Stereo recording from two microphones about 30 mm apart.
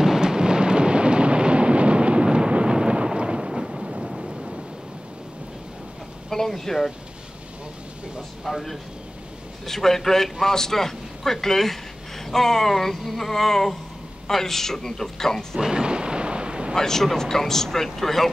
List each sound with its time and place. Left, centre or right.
0.0 s thunder: right
6.3 s speech: centre
8.5 s speech: centre
15.6 s thunder: right
16.7 s speech: centre